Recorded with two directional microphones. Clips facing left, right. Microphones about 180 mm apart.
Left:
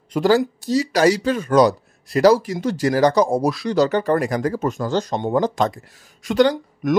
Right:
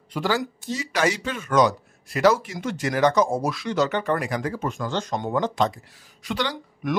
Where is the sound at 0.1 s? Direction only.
40° left (ahead or behind).